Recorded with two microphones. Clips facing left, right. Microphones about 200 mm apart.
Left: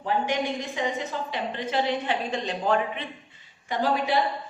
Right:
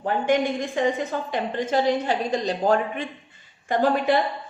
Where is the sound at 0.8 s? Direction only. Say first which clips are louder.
Right 7 dB; 50° right (ahead or behind).